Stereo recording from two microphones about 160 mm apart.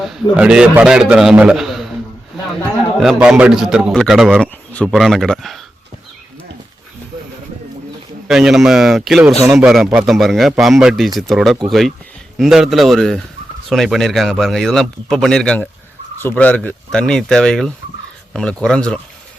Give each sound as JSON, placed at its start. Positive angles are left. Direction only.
{"t": 0.0, "sound": "a man's voice", "side_deg": -5}
{"t": 3.0, "sound": "a man's voice", "side_deg": 0}
{"t": 8.3, "sound": "a man's voice", "side_deg": -5}